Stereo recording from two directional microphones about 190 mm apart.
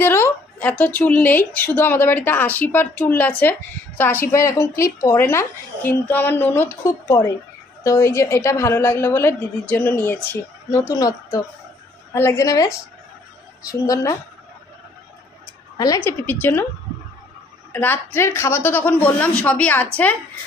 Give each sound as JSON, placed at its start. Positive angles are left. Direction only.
{"t": 0.0, "sound": "a woman's voice", "side_deg": 10}
{"t": 15.8, "sound": "a woman's voice", "side_deg": 15}
{"t": 17.7, "sound": "a woman's voice", "side_deg": 10}